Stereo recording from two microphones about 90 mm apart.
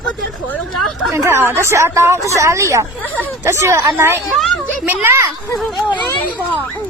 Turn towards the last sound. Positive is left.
turn(degrees=-25)  # may be behind; listen again after turning